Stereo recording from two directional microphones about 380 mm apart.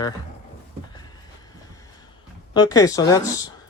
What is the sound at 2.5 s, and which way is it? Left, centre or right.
Speech, centre.